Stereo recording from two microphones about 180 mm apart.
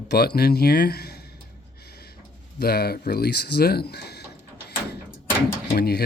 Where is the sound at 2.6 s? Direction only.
60° left (ahead or behind).